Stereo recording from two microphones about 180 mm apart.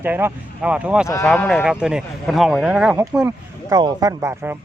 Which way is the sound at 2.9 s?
15° right (ahead or behind).